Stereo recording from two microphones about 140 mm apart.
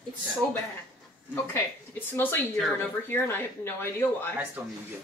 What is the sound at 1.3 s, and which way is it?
A woman's voice, 15° left (ahead or behind).